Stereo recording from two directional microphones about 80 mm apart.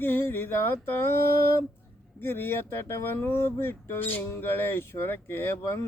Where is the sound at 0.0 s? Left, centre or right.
Left.